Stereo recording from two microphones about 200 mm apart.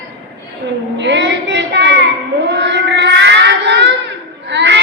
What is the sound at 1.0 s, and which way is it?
Child singing, 60° right (ahead or behind).